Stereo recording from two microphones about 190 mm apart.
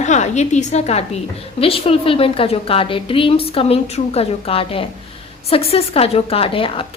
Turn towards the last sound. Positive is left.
turn(degrees=30)  # may be behind; listen again after turning